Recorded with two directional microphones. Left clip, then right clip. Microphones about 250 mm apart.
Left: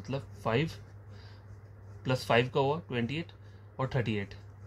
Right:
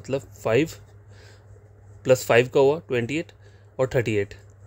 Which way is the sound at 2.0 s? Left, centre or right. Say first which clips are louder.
Right 10 dB; right.